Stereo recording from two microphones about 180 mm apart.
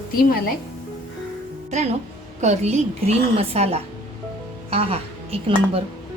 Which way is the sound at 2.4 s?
40° right (ahead or behind).